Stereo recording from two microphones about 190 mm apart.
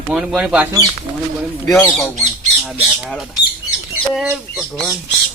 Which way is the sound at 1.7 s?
Centre (ahead or behind).